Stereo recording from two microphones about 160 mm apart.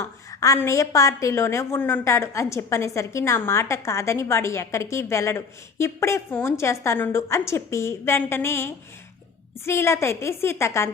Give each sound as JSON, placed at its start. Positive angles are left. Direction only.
{"t": 0.0, "sound": "a woman's voice", "side_deg": 20}